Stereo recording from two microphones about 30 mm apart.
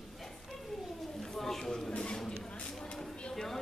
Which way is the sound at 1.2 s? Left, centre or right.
Centre.